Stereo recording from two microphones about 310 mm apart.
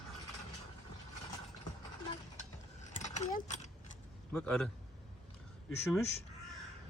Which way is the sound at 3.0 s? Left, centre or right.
Left.